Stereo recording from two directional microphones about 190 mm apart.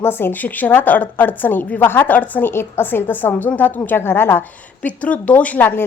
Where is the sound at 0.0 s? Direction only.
10° left (ahead or behind).